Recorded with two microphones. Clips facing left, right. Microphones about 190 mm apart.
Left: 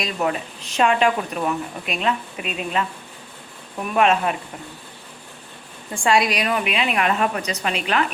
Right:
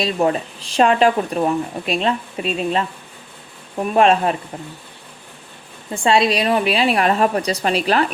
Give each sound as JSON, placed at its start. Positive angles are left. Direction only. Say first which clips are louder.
{"t": 0.0, "sound": "speech", "louder": "right 5 dB", "side_deg": -30}
{"t": 5.9, "sound": "speech", "louder": "right 3 dB", "side_deg": -25}